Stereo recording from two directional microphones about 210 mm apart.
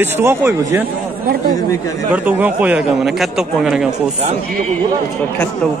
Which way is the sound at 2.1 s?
10° right (ahead or behind).